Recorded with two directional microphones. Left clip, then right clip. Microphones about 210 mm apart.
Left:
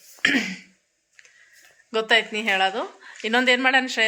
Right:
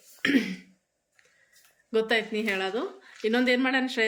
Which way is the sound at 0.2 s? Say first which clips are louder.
Left 5 dB; 10° right (ahead or behind).